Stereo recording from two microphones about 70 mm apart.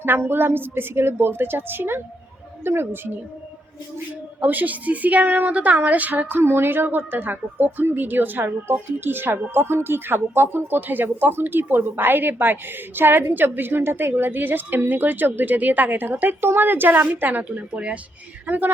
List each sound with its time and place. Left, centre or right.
0.0 s a woman's voice: right
4.4 s a woman's voice: right